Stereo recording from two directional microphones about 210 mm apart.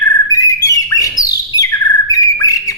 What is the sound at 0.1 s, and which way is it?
Bird, 15° left (ahead or behind).